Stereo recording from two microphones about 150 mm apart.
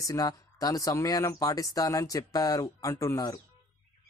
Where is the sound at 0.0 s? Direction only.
25° left (ahead or behind).